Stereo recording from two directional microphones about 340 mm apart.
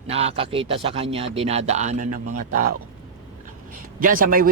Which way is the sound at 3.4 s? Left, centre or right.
Right.